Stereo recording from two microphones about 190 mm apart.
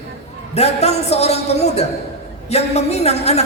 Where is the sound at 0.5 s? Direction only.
35° left (ahead or behind).